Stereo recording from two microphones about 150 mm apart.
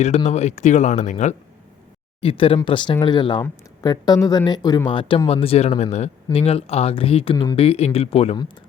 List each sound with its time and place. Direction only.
0.3 s speech: 50° left (ahead or behind)
2.2 s speech: 35° left (ahead or behind)